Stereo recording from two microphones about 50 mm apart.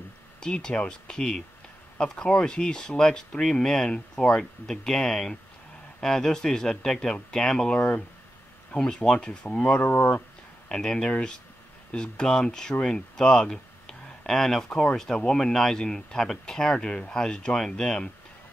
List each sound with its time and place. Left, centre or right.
0.4 s speech: centre
7.7 s speech: left
8.7 s speech: centre; by 10.2 s left
10.7 s speech: centre